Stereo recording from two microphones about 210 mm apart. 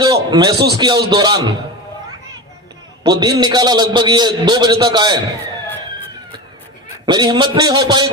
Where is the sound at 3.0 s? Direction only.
20° right (ahead or behind).